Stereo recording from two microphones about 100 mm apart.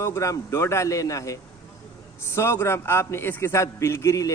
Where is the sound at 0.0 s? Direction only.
30° left (ahead or behind).